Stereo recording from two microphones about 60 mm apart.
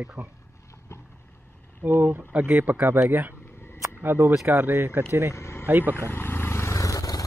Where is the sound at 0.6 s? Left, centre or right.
Left.